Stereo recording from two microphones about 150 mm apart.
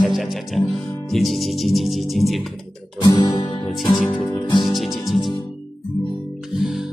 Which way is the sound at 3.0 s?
30° left (ahead or behind).